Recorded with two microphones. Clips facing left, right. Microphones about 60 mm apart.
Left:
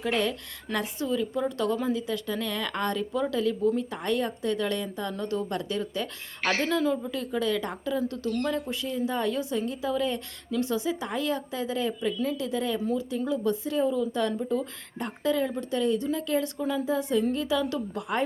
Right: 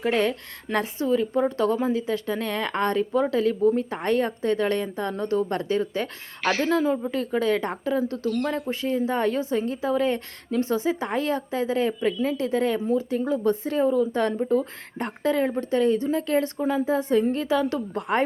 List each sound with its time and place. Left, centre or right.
0.0 s speech: right